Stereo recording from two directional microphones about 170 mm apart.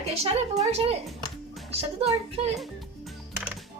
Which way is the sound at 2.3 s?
35° right (ahead or behind).